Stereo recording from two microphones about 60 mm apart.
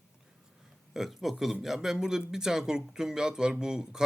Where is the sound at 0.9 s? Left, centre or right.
Centre.